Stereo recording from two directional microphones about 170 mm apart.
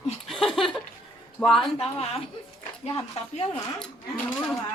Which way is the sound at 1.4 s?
5° left (ahead or behind).